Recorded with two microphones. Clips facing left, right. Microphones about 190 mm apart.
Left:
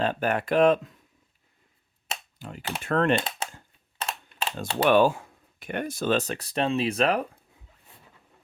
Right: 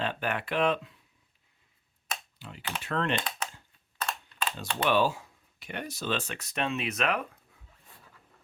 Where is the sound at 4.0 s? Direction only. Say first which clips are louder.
Left 2 dB; 30° left (ahead or behind).